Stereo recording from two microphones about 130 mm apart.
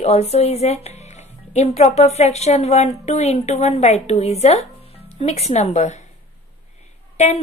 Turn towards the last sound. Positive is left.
turn(degrees=55)  # may be behind; listen again after turning